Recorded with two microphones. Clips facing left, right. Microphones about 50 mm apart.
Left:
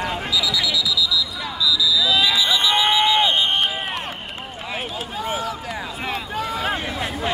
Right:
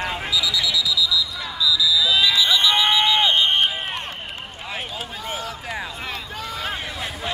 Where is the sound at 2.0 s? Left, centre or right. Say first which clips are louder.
Left 1 dB; centre.